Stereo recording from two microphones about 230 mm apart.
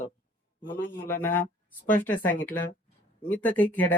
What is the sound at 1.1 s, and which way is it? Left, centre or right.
Speech, centre.